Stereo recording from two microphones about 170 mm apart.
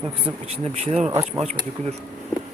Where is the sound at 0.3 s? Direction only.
35° right (ahead or behind).